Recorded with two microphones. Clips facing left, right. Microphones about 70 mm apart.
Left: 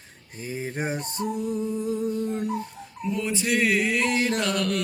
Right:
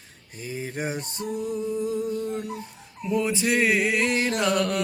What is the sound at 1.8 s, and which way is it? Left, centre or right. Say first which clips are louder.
Humming: right 1 dB; left.